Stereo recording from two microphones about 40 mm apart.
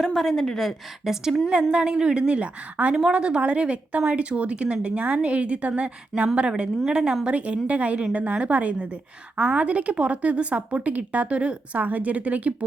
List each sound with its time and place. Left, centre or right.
0.0 s a woman's voice: centre
1.0 s a woman's voice: centre
1.7 s a woman's voice: right
3.1 s speech: right
6.8 s a woman's voice: right
7.3 s speech: right
11.8 s speech: right